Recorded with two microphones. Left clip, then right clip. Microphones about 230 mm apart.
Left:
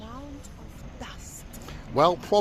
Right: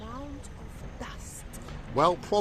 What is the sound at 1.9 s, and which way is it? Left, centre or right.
Speech, left.